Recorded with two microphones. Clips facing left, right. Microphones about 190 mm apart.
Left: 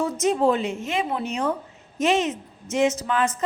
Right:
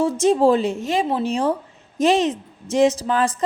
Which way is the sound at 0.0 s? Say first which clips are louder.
Right 5 dB; 30° right (ahead or behind).